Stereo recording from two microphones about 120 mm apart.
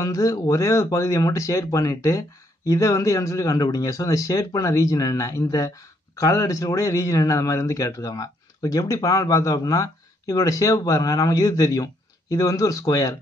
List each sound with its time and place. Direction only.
0.0 s a man's voice: 30° left (ahead or behind)